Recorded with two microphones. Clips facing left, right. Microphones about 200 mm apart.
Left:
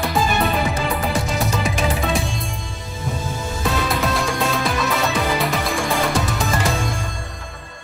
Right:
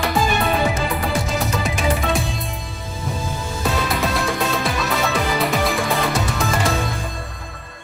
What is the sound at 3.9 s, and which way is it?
Music, centre (ahead or behind).